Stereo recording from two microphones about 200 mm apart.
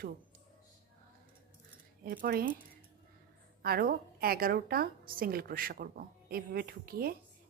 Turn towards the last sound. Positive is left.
turn(degrees=-50)  # may be behind; listen again after turning